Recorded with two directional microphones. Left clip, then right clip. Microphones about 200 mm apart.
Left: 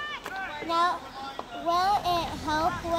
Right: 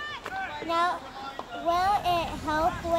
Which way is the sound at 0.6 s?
5° right (ahead or behind).